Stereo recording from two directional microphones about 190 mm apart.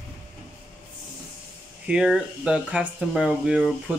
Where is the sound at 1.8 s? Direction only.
5° right (ahead or behind).